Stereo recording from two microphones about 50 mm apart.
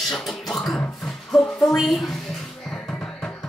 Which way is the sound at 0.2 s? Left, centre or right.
Centre.